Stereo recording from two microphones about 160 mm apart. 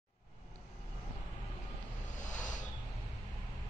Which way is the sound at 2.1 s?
50° left (ahead or behind).